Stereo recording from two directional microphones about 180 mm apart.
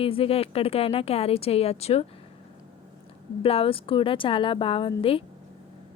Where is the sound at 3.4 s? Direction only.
30° left (ahead or behind).